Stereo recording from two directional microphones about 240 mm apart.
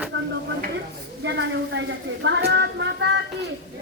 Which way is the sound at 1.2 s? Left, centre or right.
Right.